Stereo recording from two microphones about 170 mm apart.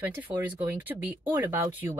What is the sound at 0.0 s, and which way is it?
Speech, 10° right (ahead or behind).